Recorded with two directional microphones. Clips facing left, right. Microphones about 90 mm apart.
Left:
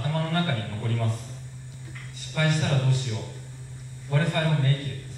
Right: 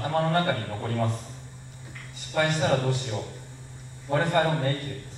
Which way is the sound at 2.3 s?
30° right (ahead or behind).